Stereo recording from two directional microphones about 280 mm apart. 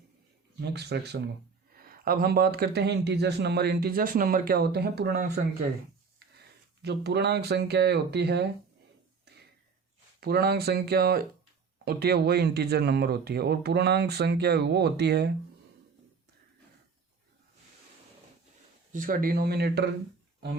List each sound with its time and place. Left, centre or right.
0.6 s speech: right
6.8 s speech: right
10.2 s speech: right
18.9 s speech: right